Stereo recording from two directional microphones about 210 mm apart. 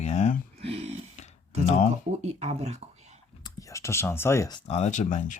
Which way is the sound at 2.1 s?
30° right (ahead or behind).